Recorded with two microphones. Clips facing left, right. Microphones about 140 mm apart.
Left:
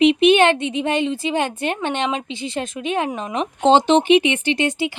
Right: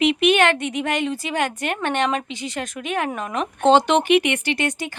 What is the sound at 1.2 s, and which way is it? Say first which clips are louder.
A woman's voice: left 3 dB; 25° left (ahead or behind).